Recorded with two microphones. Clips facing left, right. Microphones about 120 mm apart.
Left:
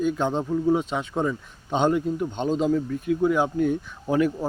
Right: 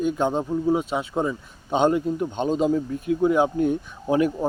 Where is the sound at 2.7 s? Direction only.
30° right (ahead or behind).